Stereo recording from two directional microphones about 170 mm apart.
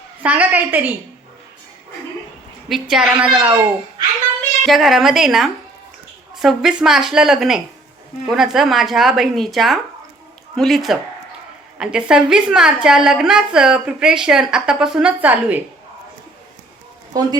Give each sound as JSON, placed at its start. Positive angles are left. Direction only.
{"t": 0.2, "sound": "a woman's voice", "side_deg": -10}
{"t": 2.6, "sound": "a woman's voice", "side_deg": 0}
{"t": 4.6, "sound": "a woman's voice", "side_deg": 0}
{"t": 17.1, "sound": "speech", "side_deg": -20}